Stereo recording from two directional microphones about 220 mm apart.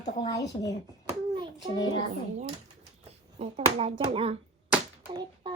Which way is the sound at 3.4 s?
30° right (ahead or behind).